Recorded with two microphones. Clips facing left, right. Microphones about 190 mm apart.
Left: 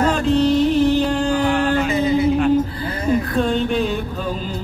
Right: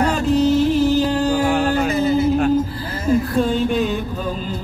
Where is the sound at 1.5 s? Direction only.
45° right (ahead or behind).